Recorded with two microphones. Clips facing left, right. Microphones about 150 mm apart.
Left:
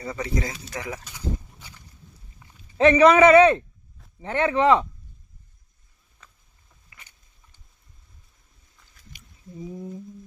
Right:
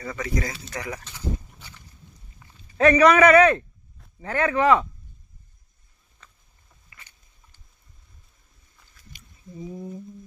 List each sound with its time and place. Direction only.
0.2 s a man's voice: 25° left (ahead or behind)
0.6 s speech: 10° left (ahead or behind)
1.0 s pig: 15° left (ahead or behind)
2.7 s a man's voice: 25° left (ahead or behind)
6.2 s boat: 5° left (ahead or behind)
6.9 s a sound: 5° left (ahead or behind)
9.6 s humming: 10° right (ahead or behind)